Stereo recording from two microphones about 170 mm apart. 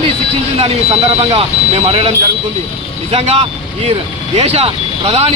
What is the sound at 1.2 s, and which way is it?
Speech, 35° right (ahead or behind).